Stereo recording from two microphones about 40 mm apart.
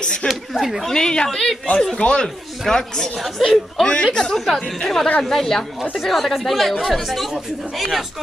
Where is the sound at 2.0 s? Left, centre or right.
Left.